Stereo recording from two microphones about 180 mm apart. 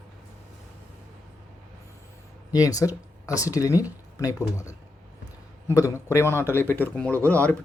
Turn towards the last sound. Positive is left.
turn(degrees=10)  # may be behind; listen again after turning